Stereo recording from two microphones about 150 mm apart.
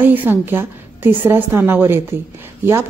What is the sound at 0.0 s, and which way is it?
A woman's voice, 10° right (ahead or behind).